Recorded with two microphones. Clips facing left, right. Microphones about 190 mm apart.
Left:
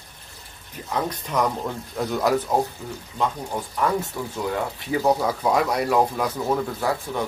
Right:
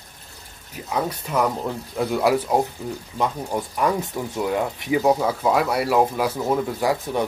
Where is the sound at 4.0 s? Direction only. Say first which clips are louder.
Right 2 dB; 15° right (ahead or behind).